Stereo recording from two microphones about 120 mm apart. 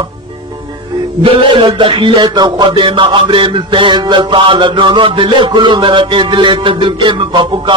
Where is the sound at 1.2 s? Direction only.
45° right (ahead or behind).